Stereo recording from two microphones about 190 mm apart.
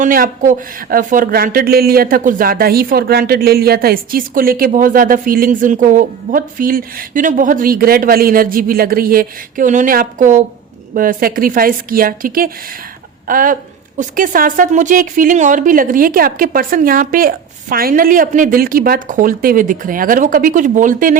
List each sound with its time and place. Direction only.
0.0 s speech: 45° right (ahead or behind)